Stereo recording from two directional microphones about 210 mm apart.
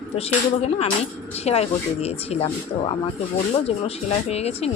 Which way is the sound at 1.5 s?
30° left (ahead or behind).